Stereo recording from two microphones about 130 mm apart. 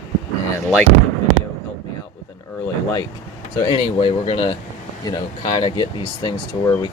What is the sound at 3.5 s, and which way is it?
Speech, 40° left (ahead or behind).